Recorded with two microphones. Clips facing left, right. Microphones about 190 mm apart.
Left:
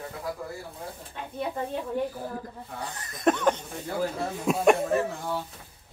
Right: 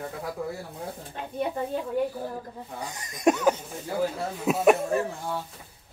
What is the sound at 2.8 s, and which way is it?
Speech, 10° right (ahead or behind).